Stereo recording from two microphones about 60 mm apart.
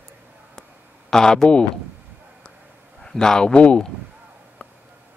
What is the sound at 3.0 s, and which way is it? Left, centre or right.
Speech, centre.